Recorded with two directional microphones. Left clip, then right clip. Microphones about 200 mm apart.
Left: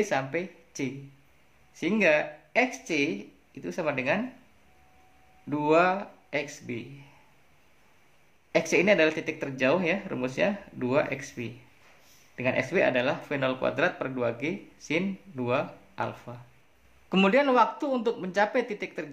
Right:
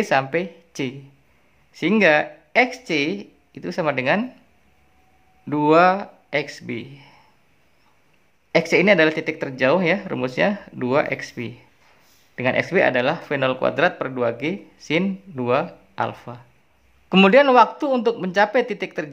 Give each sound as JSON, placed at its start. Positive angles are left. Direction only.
{"t": 0.0, "sound": "speech", "side_deg": -35}
{"t": 5.5, "sound": "speech", "side_deg": -30}
{"t": 8.5, "sound": "speech", "side_deg": -30}